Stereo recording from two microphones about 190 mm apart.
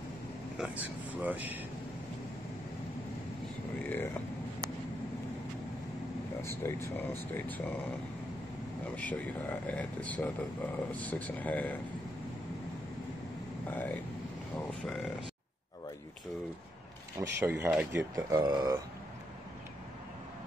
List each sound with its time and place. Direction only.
0.6 s speech: 10° right (ahead or behind)
3.8 s speech: 10° left (ahead or behind)
6.6 s speech: 15° left (ahead or behind)
8.9 s speech: 10° left (ahead or behind)
13.7 s vehicle: 10° left (ahead or behind)
17.4 s speech: 10° right (ahead or behind)
18.1 s speech: 20° right (ahead or behind)